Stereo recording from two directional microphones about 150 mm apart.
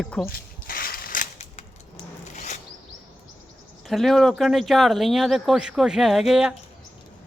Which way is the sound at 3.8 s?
Centre (ahead or behind).